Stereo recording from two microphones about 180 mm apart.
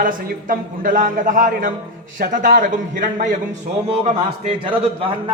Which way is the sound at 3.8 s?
35° right (ahead or behind).